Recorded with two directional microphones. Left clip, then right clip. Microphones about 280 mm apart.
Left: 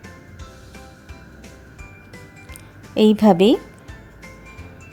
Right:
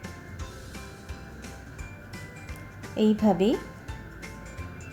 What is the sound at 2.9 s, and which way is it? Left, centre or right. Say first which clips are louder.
Speech: left 9 dB; left.